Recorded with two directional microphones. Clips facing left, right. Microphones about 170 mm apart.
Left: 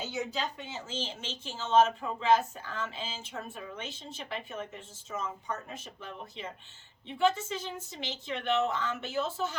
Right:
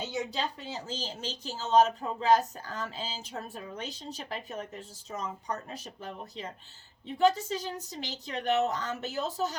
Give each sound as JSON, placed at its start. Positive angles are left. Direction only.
{"t": 0.3, "sound": "speech", "side_deg": -35}